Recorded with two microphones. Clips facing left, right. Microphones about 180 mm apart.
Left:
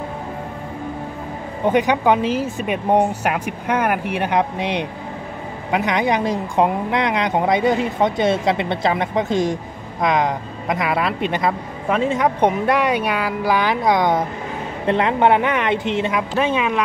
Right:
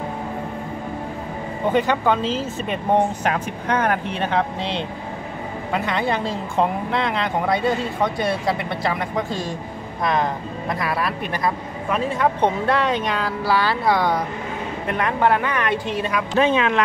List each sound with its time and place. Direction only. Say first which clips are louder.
1.7 s a woman's voice: left 3 dB; 15° left (ahead or behind)
16.3 s speech: right 3 dB; 5° left (ahead or behind)